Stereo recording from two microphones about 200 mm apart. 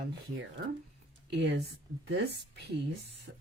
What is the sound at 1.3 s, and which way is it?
Speech, 60° right (ahead or behind).